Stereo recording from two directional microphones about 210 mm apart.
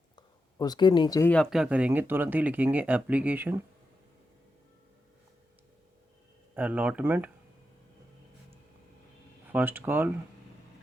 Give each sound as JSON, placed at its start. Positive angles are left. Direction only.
{"t": 0.2, "sound": "speech", "side_deg": 20}
{"t": 1.3, "sound": "speech", "side_deg": 0}
{"t": 6.5, "sound": "speech", "side_deg": -5}
{"t": 9.5, "sound": "speech", "side_deg": -10}